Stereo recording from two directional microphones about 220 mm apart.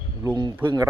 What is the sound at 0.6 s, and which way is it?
Speech, 20° right (ahead or behind).